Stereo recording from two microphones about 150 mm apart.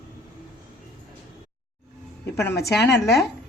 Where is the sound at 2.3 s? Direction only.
20° left (ahead or behind).